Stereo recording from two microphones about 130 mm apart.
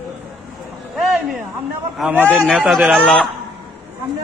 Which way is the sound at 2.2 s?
5° left (ahead or behind).